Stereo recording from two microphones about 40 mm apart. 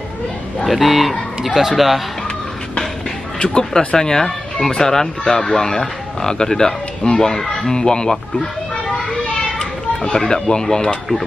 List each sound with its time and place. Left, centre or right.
0.7 s speech: centre
3.7 s speech: centre
10.1 s speech: centre